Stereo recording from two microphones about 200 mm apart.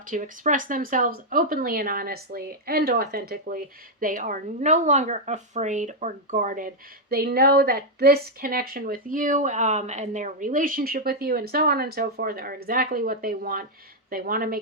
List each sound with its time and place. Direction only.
0.1 s speech: 40° right (ahead or behind)